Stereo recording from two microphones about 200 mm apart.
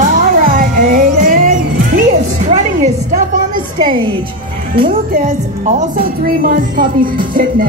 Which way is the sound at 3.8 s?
25° right (ahead or behind).